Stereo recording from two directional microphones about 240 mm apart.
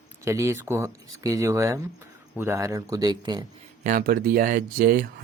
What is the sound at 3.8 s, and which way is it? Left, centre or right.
Speech, right.